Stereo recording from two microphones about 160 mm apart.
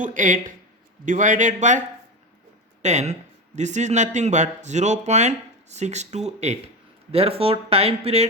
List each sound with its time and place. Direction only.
0.0 s a man's voice: 55° right (ahead or behind)
2.8 s a man's voice: 45° right (ahead or behind)